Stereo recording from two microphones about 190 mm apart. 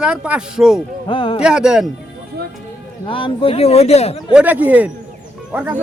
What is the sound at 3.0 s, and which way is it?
Speech, 25° left (ahead or behind).